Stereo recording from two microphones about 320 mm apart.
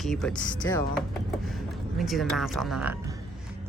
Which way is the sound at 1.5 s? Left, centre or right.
Centre.